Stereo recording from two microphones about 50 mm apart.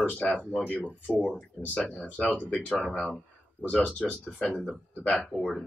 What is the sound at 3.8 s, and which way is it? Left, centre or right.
Speech, left.